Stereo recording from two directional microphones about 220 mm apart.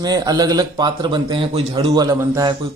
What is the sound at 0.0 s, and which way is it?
A man's voice, 15° right (ahead or behind).